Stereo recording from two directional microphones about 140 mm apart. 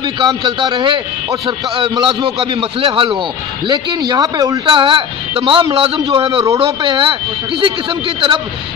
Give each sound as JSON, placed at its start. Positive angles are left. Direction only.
{"t": 0.0, "sound": "a man's voice", "side_deg": -35}
{"t": 4.6, "sound": "a man's voice", "side_deg": -35}